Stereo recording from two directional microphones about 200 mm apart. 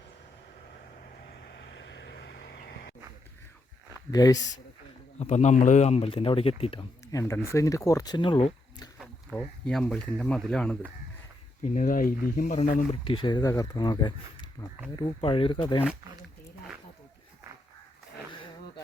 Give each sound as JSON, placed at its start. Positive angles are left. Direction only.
{"t": 1.5, "sound": "vehicle", "side_deg": 65}
{"t": 4.1, "sound": "speech", "side_deg": 20}
{"t": 5.2, "sound": "speech", "side_deg": 35}
{"t": 9.0, "sound": "speech", "side_deg": 0}
{"t": 11.6, "sound": "speech", "side_deg": 40}
{"t": 13.1, "sound": "speech", "side_deg": 25}